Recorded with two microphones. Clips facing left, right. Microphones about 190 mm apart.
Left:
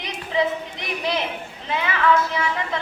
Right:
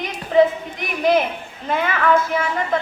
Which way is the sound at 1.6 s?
50° right (ahead or behind).